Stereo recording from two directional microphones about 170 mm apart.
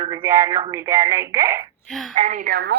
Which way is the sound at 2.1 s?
45° right (ahead or behind).